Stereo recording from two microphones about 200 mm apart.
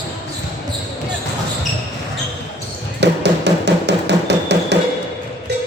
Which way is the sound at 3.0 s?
60° right (ahead or behind).